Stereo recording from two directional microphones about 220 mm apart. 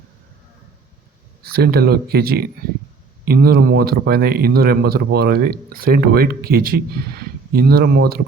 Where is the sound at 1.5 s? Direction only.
45° right (ahead or behind).